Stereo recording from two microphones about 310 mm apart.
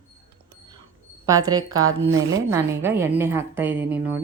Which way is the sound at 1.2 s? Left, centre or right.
Centre.